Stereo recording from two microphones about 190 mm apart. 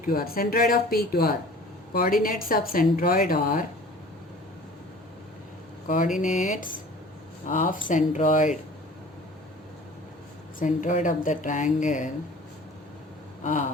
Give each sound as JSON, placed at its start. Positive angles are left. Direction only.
{"t": 0.0, "sound": "a woman's voice", "side_deg": 50}
{"t": 6.1, "sound": "a woman's voice", "side_deg": 40}
{"t": 10.6, "sound": "a woman's voice", "side_deg": 40}
{"t": 13.4, "sound": "a sound", "side_deg": 40}